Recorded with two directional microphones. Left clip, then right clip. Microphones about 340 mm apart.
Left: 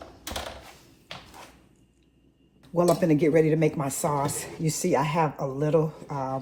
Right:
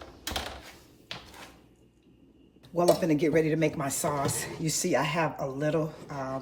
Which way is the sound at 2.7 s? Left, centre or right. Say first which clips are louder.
Left 2 dB; centre.